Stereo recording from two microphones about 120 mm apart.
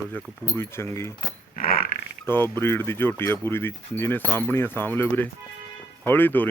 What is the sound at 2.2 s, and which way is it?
Speech, 20° left (ahead or behind).